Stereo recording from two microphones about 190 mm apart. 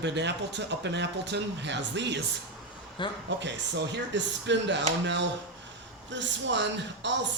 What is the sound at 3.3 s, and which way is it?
Speech, 70° right (ahead or behind).